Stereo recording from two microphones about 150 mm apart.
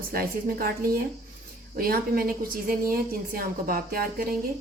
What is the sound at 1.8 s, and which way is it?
A woman's voice, 80° right.